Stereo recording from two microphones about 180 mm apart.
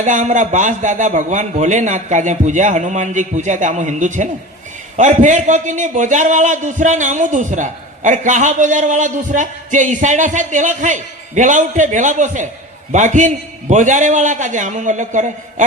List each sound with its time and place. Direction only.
0.0 s a man's voice: 45° right (ahead or behind)